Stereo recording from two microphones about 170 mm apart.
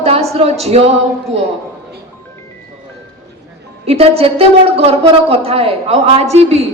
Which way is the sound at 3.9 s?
35° right (ahead or behind).